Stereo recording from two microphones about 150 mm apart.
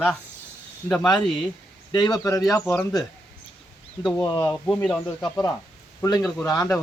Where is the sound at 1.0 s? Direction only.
25° left (ahead or behind).